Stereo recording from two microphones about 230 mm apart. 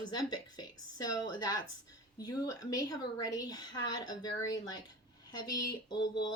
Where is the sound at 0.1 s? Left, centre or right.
Centre.